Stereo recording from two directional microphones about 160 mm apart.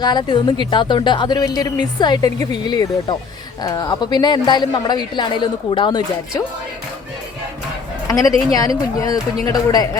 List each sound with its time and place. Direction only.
0.0 s a woman's voice: 25° left (ahead or behind)
8.0 s a woman's voice: 20° left (ahead or behind)